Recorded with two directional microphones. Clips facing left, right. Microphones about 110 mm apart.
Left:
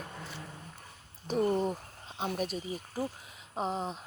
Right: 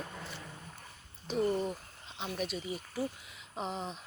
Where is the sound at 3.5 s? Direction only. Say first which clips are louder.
Left 4 dB; 40° left (ahead or behind).